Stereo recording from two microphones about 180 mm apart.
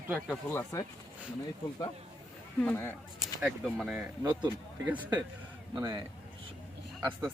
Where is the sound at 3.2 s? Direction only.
Centre (ahead or behind).